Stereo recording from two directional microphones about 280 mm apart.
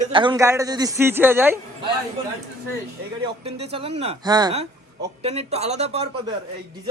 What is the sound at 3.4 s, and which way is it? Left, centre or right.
A man's voice, right.